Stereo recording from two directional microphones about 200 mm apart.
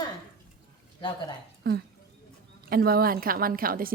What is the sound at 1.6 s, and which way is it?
A woman's voice, 50° right (ahead or behind).